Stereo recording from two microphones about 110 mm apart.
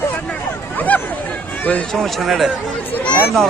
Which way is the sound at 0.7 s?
15° left (ahead or behind).